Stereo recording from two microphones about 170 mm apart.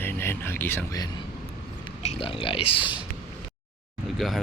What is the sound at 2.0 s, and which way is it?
Speech, 35° left (ahead or behind).